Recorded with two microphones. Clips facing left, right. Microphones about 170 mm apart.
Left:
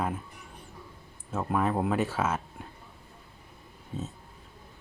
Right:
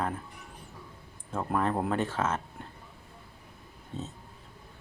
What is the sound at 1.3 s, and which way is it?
Speech, 5° left (ahead or behind).